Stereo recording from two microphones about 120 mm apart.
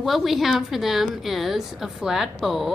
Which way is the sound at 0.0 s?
Centre (ahead or behind).